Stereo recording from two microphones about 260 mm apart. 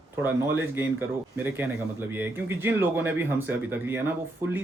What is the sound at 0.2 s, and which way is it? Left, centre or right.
A man's voice, centre.